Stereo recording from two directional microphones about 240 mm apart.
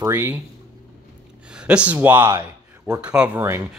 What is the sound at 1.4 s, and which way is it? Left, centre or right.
Speech, centre.